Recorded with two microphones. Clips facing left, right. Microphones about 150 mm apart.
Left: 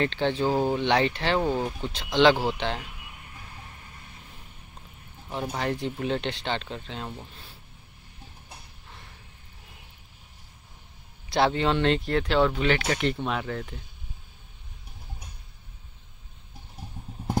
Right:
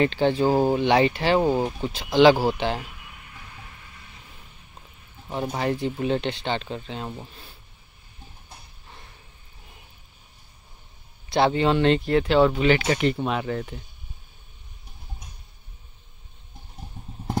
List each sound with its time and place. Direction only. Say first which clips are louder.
0.0 s speech: right 5 dB; 10° right (ahead or behind)
0.5 s speech: right 3 dB; 40° right (ahead or behind)
0.7 s speech: right 4 dB; 10° right (ahead or behind)
3.8 s vehicle: even; 40° left (ahead or behind)
5.3 s speech: right 3 dB; 5° right (ahead or behind)
11.2 s speech: right 3 dB; centre (ahead or behind)